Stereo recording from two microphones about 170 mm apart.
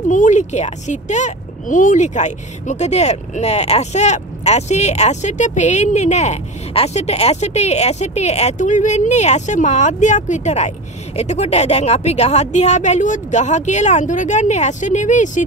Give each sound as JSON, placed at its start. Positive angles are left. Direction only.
{"t": 0.1, "sound": "a woman's voice", "side_deg": 45}